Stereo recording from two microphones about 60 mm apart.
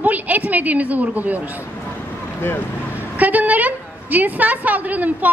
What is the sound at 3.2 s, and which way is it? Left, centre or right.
A woman's voice, right.